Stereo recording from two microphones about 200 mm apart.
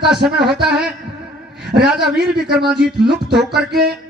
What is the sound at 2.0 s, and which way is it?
Speech, 55° right (ahead or behind).